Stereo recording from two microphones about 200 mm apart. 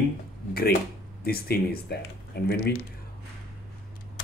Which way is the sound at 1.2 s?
50° left (ahead or behind).